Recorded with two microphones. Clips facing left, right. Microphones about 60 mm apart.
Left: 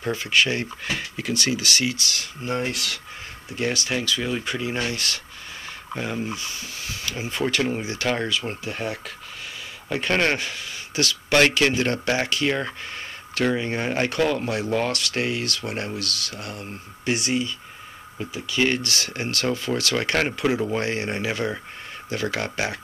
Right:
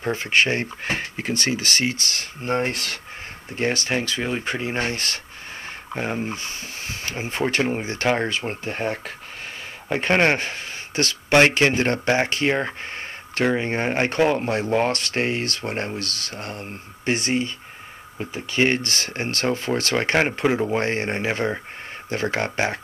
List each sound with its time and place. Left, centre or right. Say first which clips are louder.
0.0 s speech: right 1 dB; right